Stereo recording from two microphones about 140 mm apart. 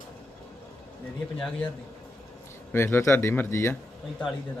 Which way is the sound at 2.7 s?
15° left (ahead or behind).